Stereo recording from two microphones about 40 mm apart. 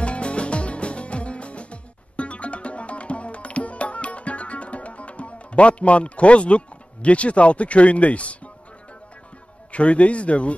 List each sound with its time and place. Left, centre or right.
0.0 s music: left
9.7 s speech: left